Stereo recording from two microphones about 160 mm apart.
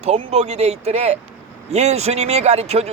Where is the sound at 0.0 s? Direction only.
40° right (ahead or behind).